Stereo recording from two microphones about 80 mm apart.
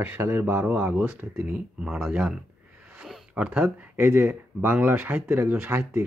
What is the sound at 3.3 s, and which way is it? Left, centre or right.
Speech, centre.